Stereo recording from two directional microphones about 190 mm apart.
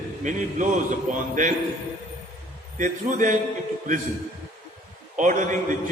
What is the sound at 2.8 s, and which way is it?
Speech, 40° right (ahead or behind).